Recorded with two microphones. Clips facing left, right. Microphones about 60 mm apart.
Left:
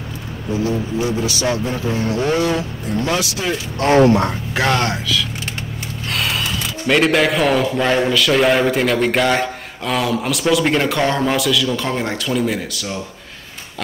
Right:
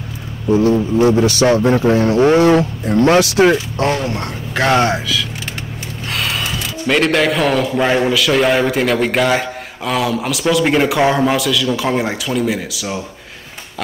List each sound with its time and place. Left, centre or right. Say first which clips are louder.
0.5 s speech: right 7 dB; right
2.0 s speech: right 6 dB; right
4.7 s a man's voice: right 4 dB; centre
6.0 s a sound: right 1 dB; centre
7.8 s a man's voice: right 2 dB; centre